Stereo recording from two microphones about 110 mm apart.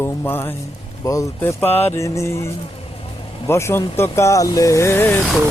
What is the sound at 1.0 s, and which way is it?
Speech, 30° left (ahead or behind).